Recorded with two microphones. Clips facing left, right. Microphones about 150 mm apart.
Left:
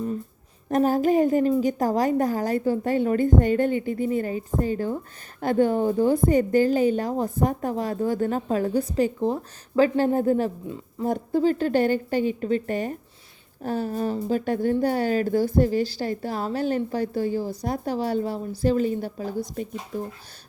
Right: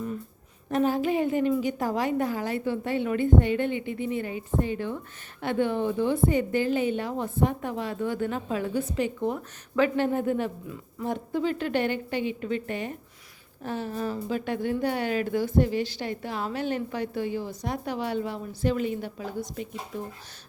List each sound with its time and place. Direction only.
0.7 s a woman's voice: 40° left (ahead or behind)